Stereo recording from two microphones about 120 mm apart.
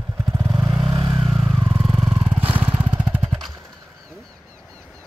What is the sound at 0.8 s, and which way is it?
Vehicle, 45° right (ahead or behind).